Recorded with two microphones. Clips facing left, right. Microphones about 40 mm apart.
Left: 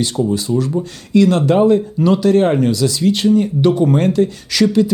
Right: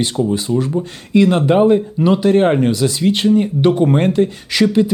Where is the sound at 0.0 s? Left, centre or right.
Right.